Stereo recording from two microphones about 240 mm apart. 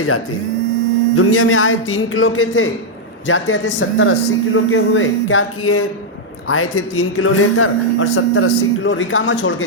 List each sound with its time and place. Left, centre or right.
1.1 s a man's voice: left